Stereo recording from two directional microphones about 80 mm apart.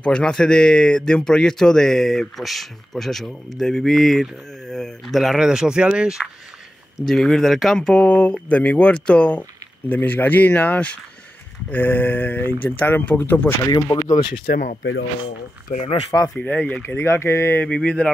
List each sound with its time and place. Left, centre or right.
0.0 s speech: centre
7.1 s speech: centre; by 13.6 s left
13.7 s speech: left
16.3 s speech: centre
17.6 s speech: centre